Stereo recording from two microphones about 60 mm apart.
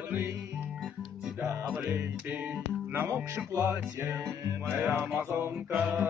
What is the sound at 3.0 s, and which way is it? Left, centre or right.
Music, right.